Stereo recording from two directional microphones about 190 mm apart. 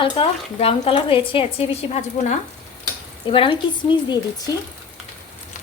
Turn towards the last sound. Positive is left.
turn(degrees=25)  # may be behind; listen again after turning